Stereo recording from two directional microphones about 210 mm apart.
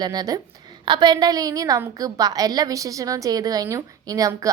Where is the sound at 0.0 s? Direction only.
20° right (ahead or behind).